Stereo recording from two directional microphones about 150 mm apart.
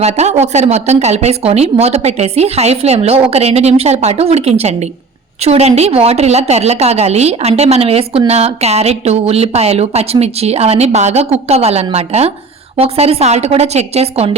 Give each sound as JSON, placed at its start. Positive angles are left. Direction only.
{"t": 0.0, "sound": "a woman's voice", "side_deg": -45}